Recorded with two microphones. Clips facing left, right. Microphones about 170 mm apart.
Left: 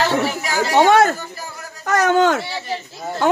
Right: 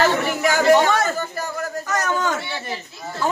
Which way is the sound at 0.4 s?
50° right (ahead or behind).